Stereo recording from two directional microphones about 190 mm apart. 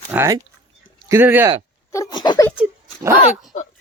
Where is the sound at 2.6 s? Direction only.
10° right (ahead or behind).